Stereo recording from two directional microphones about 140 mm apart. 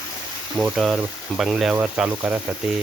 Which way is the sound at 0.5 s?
Centre (ahead or behind).